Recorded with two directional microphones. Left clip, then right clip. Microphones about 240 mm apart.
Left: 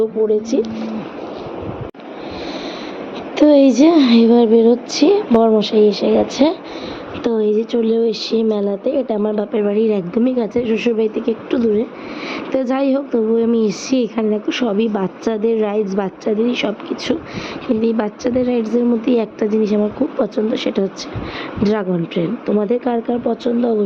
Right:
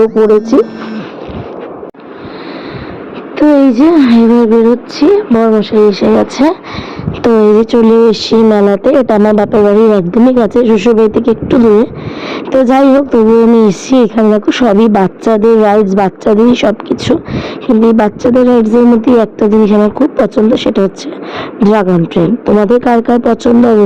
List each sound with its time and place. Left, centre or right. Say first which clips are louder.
3.3 s a woman's voice: right 4 dB; right